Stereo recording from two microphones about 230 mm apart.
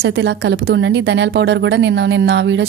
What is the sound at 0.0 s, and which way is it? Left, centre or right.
A woman's voice, right.